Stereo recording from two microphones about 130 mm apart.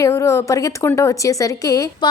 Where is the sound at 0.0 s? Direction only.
25° left (ahead or behind).